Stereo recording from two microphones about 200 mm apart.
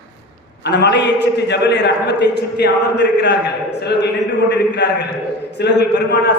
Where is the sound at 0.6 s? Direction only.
55° left (ahead or behind).